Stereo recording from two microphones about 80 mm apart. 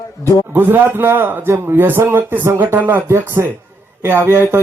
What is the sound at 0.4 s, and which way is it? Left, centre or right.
A man's voice, right.